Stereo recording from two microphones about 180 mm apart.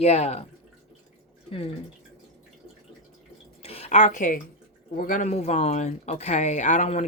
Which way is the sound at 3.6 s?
35° left (ahead or behind).